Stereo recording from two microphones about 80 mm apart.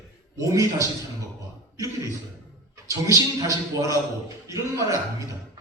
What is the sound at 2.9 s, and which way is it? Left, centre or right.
A man's voice, right.